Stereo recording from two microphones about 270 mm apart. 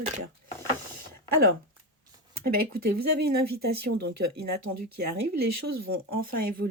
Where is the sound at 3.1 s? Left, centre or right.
Right.